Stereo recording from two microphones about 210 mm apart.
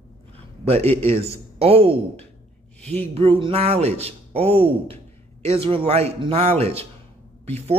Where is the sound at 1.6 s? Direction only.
25° right (ahead or behind).